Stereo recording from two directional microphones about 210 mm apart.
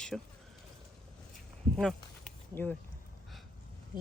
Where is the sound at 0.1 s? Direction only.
Centre (ahead or behind).